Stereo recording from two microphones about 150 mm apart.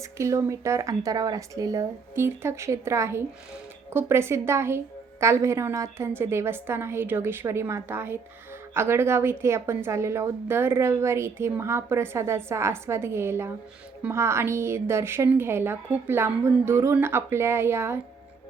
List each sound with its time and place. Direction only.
0.0 s a woman's voice: 20° right (ahead or behind)